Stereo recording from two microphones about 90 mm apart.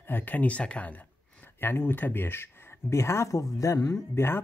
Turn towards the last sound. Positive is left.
turn(degrees=25)  # may be behind; listen again after turning